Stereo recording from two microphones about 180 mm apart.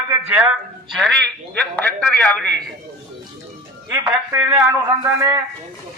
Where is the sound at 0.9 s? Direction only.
5° left (ahead or behind).